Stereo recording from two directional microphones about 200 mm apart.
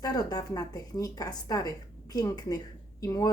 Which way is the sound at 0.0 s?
20° left (ahead or behind).